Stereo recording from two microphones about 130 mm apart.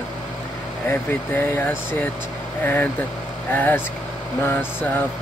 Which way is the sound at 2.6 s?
15° left (ahead or behind).